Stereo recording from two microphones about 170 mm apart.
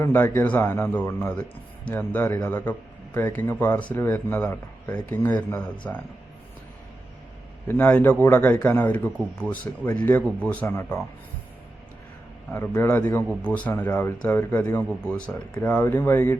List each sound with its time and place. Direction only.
0.0 s a man's voice: 10° left (ahead or behind)
7.7 s a man's voice: 10° left (ahead or behind)
12.5 s a man's voice: 10° left (ahead or behind)